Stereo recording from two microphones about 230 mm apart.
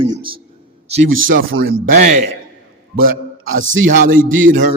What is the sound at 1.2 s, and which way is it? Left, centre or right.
A man's voice, right.